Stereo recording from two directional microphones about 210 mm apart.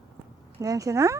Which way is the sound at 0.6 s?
15° right (ahead or behind).